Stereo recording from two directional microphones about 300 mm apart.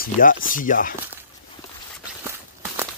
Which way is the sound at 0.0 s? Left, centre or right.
Left.